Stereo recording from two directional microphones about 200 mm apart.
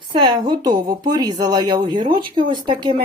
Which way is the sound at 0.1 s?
20° right (ahead or behind).